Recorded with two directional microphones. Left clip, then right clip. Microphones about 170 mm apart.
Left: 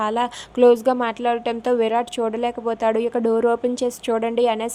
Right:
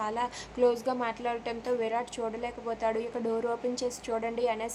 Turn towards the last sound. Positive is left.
turn(degrees=45)  # may be behind; listen again after turning